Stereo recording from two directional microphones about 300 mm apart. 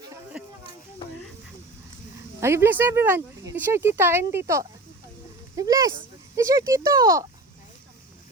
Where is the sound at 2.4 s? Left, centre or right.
Centre.